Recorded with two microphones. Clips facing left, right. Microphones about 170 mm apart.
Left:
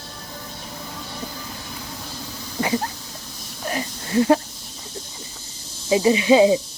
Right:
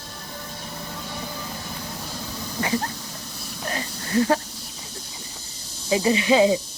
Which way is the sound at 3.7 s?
20° left (ahead or behind).